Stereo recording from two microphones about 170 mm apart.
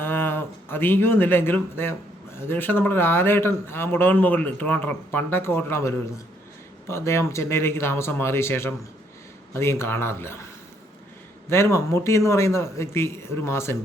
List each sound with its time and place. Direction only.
0.0 s speech: 10° left (ahead or behind)